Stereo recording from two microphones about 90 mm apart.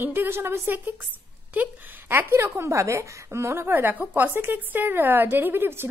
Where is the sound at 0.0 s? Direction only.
25° right (ahead or behind).